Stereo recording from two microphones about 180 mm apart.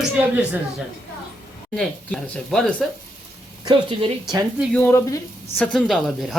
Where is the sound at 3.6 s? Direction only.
25° right (ahead or behind).